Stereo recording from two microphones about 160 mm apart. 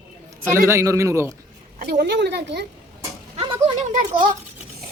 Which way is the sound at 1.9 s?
90° right.